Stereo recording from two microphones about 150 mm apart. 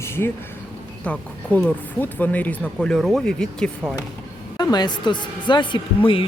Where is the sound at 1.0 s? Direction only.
5° left (ahead or behind).